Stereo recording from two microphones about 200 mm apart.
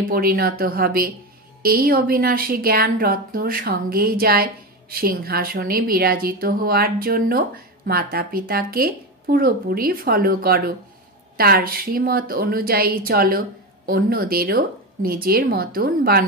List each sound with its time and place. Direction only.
0.1 s a woman's voice: 45° right (ahead or behind)